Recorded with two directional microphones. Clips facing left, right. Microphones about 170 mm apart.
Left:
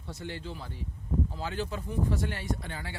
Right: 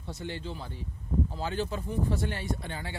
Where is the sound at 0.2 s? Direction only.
25° right (ahead or behind).